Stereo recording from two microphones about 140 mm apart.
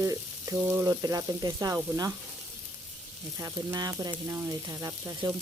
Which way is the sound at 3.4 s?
25° right (ahead or behind).